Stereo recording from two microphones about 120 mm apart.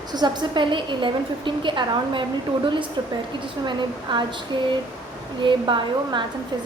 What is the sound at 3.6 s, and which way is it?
A woman's voice, 40° right (ahead or behind).